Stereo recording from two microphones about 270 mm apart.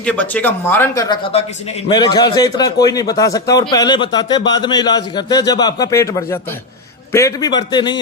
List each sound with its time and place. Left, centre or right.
0.0 s a man's voice: centre